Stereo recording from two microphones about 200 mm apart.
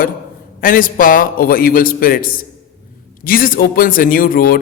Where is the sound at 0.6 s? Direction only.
45° left (ahead or behind).